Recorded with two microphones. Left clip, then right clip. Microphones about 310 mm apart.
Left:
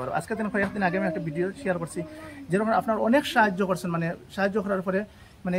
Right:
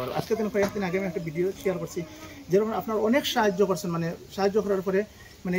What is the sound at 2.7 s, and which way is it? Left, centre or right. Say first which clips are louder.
Speech: left 3 dB; centre.